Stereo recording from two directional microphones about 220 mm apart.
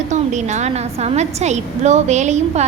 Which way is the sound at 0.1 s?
30° right (ahead or behind).